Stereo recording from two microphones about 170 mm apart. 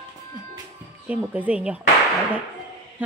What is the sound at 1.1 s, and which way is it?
Speech, 10° right (ahead or behind).